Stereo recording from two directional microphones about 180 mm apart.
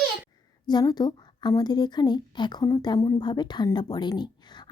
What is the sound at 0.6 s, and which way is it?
A woman's voice, 25° left (ahead or behind).